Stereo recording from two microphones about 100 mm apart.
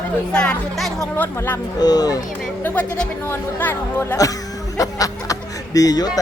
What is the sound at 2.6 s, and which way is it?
Speech, 20° left (ahead or behind).